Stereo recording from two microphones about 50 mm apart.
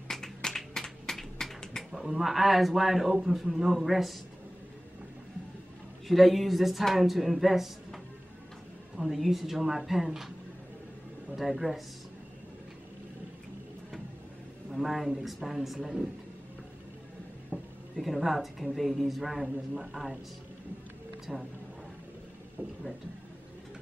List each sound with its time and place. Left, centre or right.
0.1 s a sound: centre
1.9 s a woman's voice: centre
6.0 s a woman's voice: centre
11.3 s a woman's voice: centre
14.7 s a woman's voice: centre
17.5 s a sound: right
17.9 s a woman's voice: centre
21.3 s a woman's voice: centre
22.6 s speech: right